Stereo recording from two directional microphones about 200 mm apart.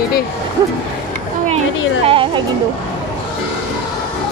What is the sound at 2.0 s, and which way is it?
Speech, 25° right (ahead or behind).